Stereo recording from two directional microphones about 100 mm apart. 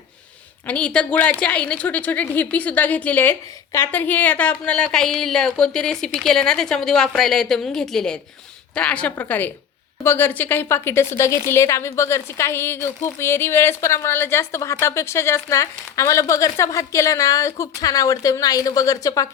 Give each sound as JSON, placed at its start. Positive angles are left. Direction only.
{"t": 0.7, "sound": "a woman's voice", "side_deg": 10}